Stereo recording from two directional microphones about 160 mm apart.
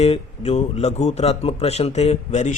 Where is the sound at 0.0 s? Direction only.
40° left (ahead or behind).